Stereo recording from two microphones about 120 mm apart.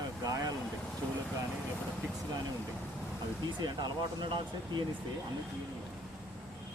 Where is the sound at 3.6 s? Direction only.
40° right (ahead or behind).